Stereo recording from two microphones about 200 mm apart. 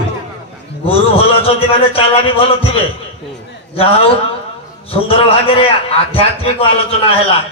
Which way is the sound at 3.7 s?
30° left (ahead or behind).